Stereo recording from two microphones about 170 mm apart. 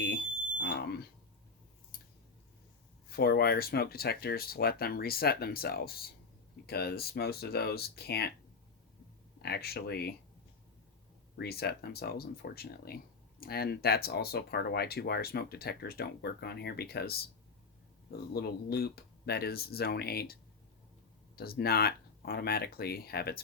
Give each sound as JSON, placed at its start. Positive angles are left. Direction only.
{"t": 0.6, "sound": "smoke detector", "side_deg": 70}
{"t": 3.1, "sound": "speech", "side_deg": 65}
{"t": 9.4, "sound": "speech", "side_deg": 70}
{"t": 11.3, "sound": "speech", "side_deg": 70}
{"t": 18.3, "sound": "speech", "side_deg": 70}